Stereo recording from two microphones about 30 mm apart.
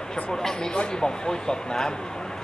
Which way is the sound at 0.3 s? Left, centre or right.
Centre.